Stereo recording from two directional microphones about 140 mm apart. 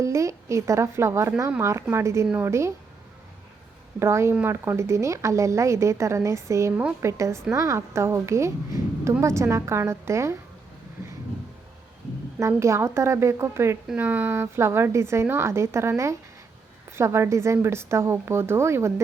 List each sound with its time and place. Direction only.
0.0 s a woman's voice: 20° right (ahead or behind)
4.0 s a woman's voice: 20° right (ahead or behind)
12.4 s a woman's voice: 20° right (ahead or behind)